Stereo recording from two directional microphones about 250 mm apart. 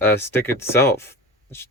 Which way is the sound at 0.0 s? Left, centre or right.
Centre.